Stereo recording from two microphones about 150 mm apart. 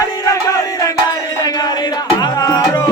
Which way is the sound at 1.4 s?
25° left (ahead or behind).